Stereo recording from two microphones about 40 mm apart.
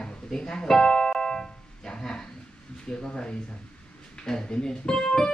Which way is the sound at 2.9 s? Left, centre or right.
Left.